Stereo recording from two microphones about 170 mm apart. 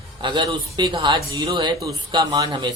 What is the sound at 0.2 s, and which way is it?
Speech, 30° right (ahead or behind).